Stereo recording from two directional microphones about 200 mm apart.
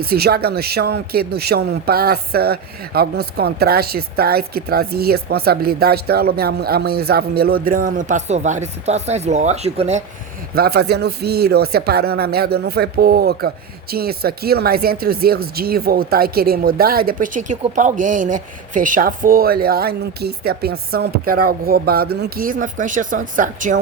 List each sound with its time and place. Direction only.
0.0 s a man's voice: 50° right (ahead or behind); by 10.0 s 30° right (ahead or behind)
10.5 s a man's voice: 50° right (ahead or behind)